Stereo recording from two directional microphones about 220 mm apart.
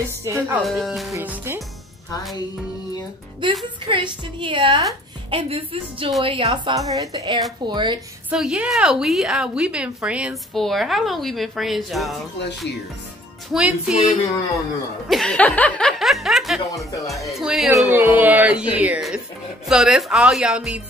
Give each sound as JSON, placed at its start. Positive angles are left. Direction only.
{"t": 0.2, "sound": "speech", "side_deg": -10}
{"t": 0.7, "sound": "a woman's voice", "side_deg": 0}
{"t": 3.4, "sound": "a woman's voice", "side_deg": -20}
{"t": 8.3, "sound": "a woman's voice", "side_deg": -5}
{"t": 13.5, "sound": "a woman's voice", "side_deg": -5}
{"t": 15.0, "sound": "speech", "side_deg": 0}
{"t": 16.7, "sound": "speech", "side_deg": 15}
{"t": 17.1, "sound": "a woman's voice", "side_deg": 0}